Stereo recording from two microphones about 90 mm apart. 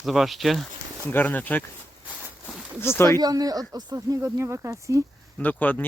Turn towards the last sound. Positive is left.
turn(degrees=20)  # may be behind; listen again after turning